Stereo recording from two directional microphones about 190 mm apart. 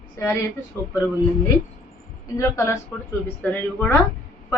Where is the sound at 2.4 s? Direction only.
15° left (ahead or behind).